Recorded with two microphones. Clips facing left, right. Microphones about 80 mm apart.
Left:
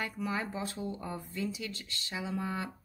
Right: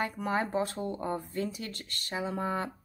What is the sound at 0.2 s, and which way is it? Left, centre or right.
A woman's voice, right.